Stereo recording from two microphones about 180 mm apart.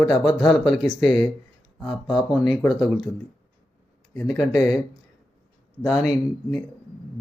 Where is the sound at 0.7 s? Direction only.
Centre (ahead or behind).